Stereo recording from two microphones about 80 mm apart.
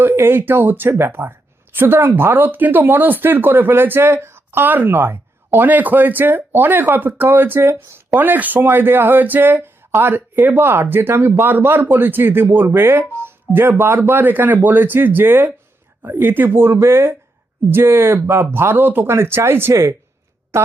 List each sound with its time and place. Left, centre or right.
0.0 s speech: right